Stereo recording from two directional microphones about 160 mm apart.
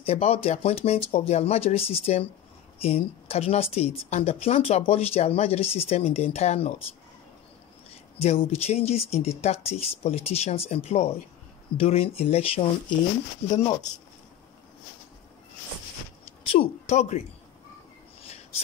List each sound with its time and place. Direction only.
0.0 s speech: 40° left (ahead or behind)
8.2 s speech: 40° left (ahead or behind)
13.5 s speech: 25° left (ahead or behind)
16.5 s speech: 45° left (ahead or behind)